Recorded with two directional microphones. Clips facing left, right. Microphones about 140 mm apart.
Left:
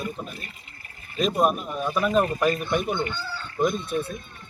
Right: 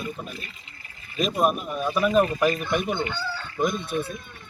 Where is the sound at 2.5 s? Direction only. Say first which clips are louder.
Even; 40° left (ahead or behind).